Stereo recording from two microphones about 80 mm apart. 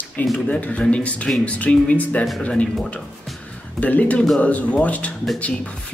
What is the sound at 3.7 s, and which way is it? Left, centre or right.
Speech, centre.